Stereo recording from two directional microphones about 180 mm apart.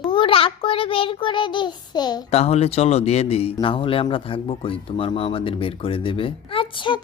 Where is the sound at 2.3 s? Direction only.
35° left (ahead or behind).